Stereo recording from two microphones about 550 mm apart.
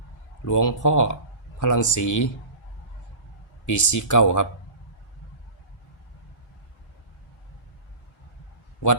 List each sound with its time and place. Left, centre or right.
0.4 s speech: left
3.7 s speech: left